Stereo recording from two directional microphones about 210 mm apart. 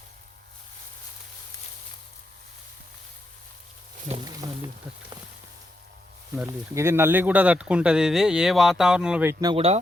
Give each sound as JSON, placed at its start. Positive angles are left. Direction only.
{"t": 4.1, "sound": "speech", "side_deg": -20}
{"t": 6.3, "sound": "speech", "side_deg": -10}
{"t": 9.4, "sound": "speech", "side_deg": -25}